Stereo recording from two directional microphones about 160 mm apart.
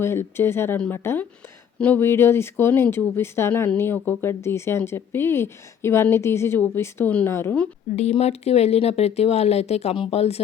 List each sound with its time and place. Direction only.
0.0 s speech: 15° left (ahead or behind)
7.9 s speech: 40° left (ahead or behind)